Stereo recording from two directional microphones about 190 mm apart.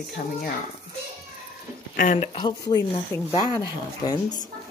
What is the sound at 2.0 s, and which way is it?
Speech, 40° left (ahead or behind).